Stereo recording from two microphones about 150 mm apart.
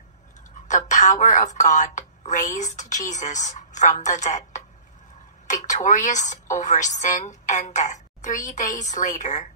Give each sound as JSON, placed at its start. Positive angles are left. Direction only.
{"t": 0.7, "sound": "a woman's voice", "side_deg": 55}